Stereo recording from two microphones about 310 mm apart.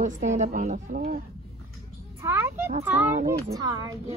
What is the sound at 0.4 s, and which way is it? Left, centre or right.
Speech, right.